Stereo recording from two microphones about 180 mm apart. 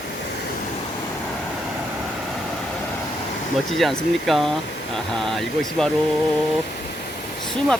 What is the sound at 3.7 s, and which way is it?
Speech, centre (ahead or behind).